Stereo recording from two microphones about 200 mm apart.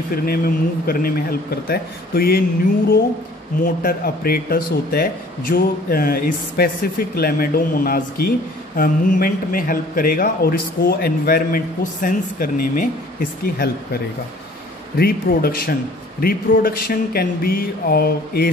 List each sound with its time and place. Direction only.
0.1 s speech: 50° left (ahead or behind)
3.6 s speech: 45° left (ahead or behind)
15.0 s speech: 50° left (ahead or behind)